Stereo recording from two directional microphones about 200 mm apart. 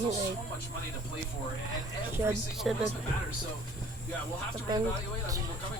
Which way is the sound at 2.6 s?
Centre (ahead or behind).